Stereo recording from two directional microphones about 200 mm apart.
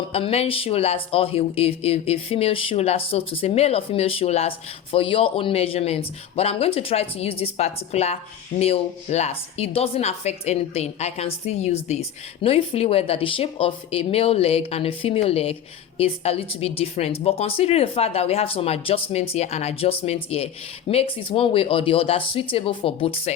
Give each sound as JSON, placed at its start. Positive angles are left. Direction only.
{"t": 0.1, "sound": "speech", "side_deg": 30}